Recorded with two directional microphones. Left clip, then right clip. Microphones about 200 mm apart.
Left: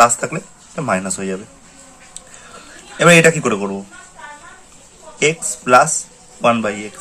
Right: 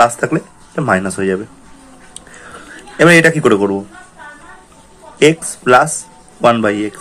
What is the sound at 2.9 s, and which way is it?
Speech, 20° right (ahead or behind).